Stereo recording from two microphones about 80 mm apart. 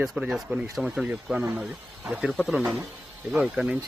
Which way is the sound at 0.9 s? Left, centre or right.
Centre.